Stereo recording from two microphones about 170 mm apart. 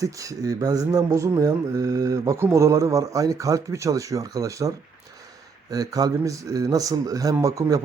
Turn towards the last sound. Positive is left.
turn(degrees=-20)  # may be behind; listen again after turning